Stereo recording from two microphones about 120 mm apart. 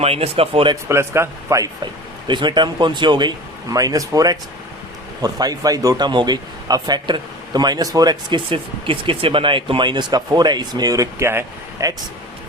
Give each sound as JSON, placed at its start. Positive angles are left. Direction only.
{"t": 0.0, "sound": "speech", "side_deg": -55}
{"t": 0.9, "sound": "speech", "side_deg": -20}
{"t": 1.8, "sound": "speech", "side_deg": -40}
{"t": 8.4, "sound": "speech", "side_deg": -45}